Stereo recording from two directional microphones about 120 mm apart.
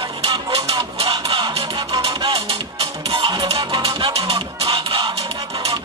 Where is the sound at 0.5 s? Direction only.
55° right (ahead or behind).